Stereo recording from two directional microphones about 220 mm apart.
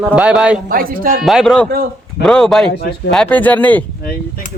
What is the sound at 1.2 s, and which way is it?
A man's voice, centre (ahead or behind).